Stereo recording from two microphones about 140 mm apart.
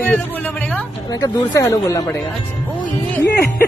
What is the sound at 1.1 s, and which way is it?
A woman's voice, 25° left (ahead or behind).